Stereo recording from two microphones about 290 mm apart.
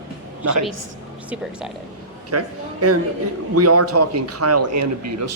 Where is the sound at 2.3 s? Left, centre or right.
Right.